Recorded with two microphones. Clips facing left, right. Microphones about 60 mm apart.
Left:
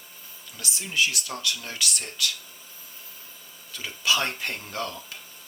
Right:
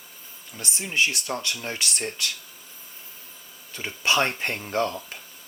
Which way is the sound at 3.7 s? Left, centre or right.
Right.